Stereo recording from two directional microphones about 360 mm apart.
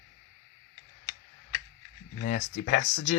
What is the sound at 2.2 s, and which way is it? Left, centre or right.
Speech, left.